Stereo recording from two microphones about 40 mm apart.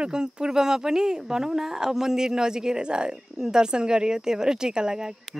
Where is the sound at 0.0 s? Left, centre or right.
Right.